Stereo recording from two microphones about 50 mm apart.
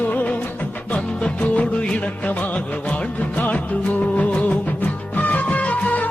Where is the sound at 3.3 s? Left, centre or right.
Left.